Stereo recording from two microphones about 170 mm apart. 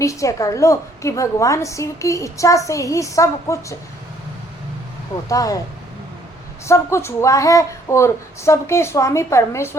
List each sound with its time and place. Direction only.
0.0 s a woman's voice: 20° left (ahead or behind)
5.3 s a woman's voice: 20° left (ahead or behind)
6.7 s speech: 15° left (ahead or behind)